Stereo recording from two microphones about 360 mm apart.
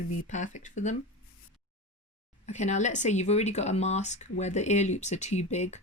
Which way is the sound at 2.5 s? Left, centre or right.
Centre.